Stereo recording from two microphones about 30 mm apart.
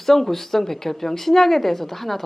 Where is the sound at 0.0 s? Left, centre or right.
Centre.